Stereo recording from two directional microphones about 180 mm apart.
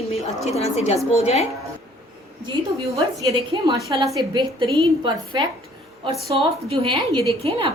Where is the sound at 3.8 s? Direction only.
20° right (ahead or behind).